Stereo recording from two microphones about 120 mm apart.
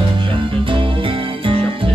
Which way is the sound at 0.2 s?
45° right (ahead or behind).